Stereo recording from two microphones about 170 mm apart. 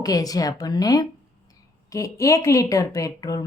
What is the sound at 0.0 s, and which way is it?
Speech, 20° left (ahead or behind).